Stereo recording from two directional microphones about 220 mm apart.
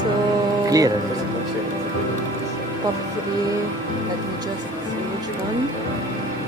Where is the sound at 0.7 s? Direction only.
15° right (ahead or behind).